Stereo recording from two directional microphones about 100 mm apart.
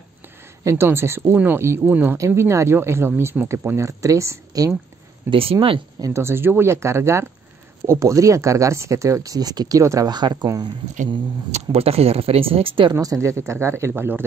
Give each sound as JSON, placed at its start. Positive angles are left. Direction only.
{"t": 0.7, "sound": "speech", "side_deg": -25}
{"t": 5.3, "sound": "speech", "side_deg": -65}
{"t": 5.9, "sound": "speech", "side_deg": -30}
{"t": 11.5, "sound": "speech", "side_deg": -85}
{"t": 12.9, "sound": "speech", "side_deg": -30}